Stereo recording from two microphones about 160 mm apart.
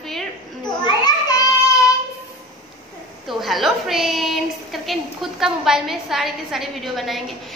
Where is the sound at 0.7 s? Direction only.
25° left (ahead or behind).